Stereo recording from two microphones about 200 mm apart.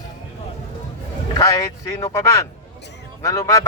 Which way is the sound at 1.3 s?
15° left (ahead or behind).